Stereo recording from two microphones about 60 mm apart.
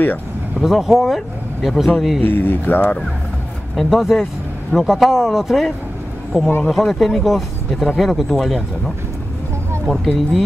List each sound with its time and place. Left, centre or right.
0.6 s speech: centre
2.2 s speech: left
3.7 s speech: centre